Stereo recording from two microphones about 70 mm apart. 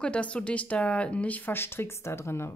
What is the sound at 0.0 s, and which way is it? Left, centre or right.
A woman's voice, centre.